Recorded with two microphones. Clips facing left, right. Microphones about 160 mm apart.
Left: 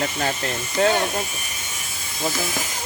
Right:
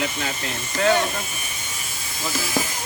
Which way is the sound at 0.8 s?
30° left (ahead or behind).